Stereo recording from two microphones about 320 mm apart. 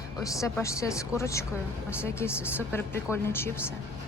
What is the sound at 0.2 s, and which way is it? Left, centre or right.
Speech, centre.